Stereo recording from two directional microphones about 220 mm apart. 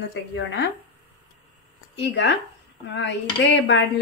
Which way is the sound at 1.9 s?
50° left (ahead or behind).